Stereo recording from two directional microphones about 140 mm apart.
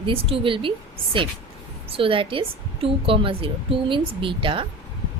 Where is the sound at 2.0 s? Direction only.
40° right (ahead or behind).